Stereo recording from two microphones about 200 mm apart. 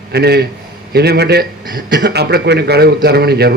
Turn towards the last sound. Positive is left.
turn(degrees=-55)  # may be behind; listen again after turning